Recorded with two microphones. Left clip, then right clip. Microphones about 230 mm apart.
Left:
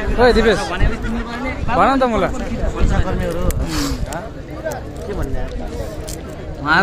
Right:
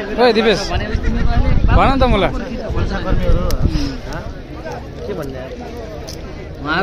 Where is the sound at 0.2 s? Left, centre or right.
Centre.